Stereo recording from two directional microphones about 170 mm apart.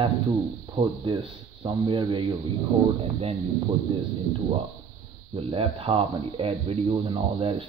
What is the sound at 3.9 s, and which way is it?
Speech, 30° right (ahead or behind).